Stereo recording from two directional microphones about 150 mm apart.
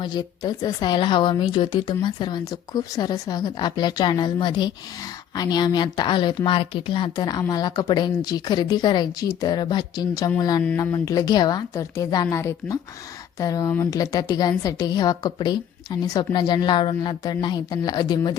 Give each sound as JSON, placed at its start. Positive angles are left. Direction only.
{"t": 0.0, "sound": "speech", "side_deg": 30}